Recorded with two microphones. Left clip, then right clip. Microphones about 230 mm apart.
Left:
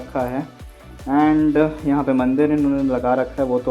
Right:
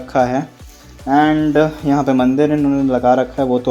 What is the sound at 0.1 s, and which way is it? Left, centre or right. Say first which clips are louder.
Speech: right 8 dB; right.